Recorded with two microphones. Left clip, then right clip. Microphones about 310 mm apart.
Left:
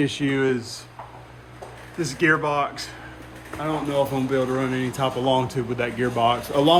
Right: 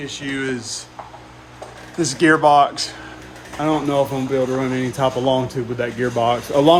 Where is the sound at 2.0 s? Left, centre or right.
Centre.